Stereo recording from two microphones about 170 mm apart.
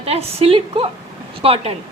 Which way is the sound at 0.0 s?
35° right (ahead or behind).